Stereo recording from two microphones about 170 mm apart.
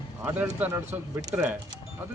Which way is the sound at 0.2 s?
10° right (ahead or behind).